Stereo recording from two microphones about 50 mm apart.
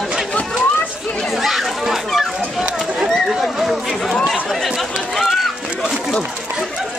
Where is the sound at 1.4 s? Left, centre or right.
Centre.